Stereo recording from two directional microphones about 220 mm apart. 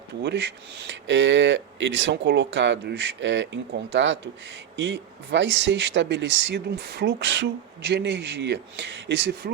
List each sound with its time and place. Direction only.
0.2 s speech: 50° right (ahead or behind)